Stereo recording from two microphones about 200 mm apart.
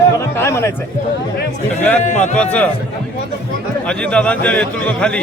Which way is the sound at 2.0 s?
35° left (ahead or behind).